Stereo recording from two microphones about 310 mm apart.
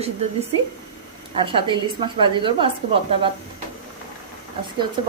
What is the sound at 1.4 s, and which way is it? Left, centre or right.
A woman's voice, centre.